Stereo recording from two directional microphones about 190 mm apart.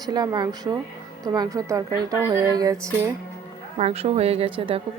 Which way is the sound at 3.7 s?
35° right (ahead or behind).